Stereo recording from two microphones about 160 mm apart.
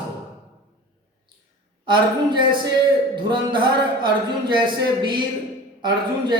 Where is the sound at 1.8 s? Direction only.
30° right (ahead or behind).